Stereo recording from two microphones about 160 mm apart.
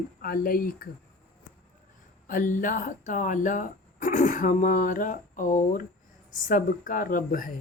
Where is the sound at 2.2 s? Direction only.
55° left (ahead or behind).